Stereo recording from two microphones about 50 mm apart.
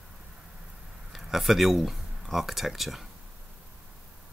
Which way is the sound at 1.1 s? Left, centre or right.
Centre.